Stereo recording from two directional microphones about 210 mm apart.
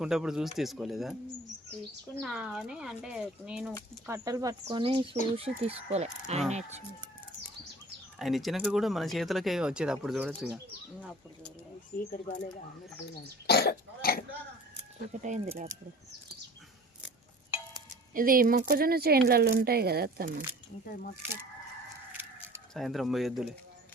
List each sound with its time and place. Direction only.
0.0 s speech: centre (ahead or behind)
2.1 s speech: centre (ahead or behind)
4.0 s speech: 15° right (ahead or behind)
4.6 s speech: 30° right (ahead or behind)
8.2 s speech: centre (ahead or behind)
11.9 s speech: 40° left (ahead or behind)
13.5 s speech: 50° left (ahead or behind)
15.2 s speech: 35° right (ahead or behind)
18.1 s speech: 40° right (ahead or behind)
20.9 s speech: 45° left (ahead or behind)
22.7 s speech: centre (ahead or behind)